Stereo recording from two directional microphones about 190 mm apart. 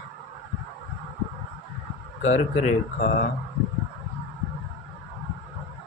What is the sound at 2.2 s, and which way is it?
Speech, 40° left (ahead or behind).